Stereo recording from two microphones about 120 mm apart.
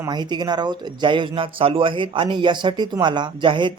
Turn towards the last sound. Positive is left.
turn(degrees=-40)  # may be behind; listen again after turning